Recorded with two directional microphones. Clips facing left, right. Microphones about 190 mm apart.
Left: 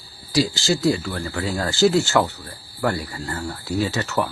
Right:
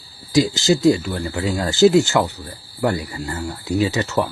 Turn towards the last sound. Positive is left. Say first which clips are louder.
# right 3 dB
turn(degrees=-20)  # may be behind; listen again after turning